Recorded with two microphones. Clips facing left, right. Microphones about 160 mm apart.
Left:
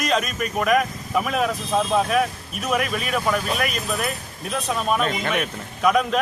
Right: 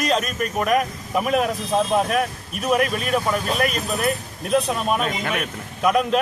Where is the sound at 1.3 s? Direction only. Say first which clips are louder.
Right 4 dB; 45° right (ahead or behind).